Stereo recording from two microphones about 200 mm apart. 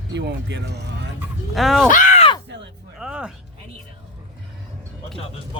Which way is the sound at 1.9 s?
40° left (ahead or behind).